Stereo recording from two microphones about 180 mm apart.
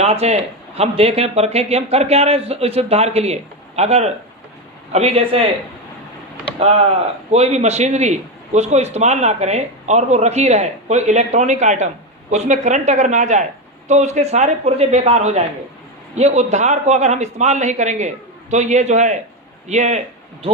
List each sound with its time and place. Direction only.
0.0 s a man's voice: 35° right (ahead or behind)
7.3 s a man's voice: 35° right (ahead or behind)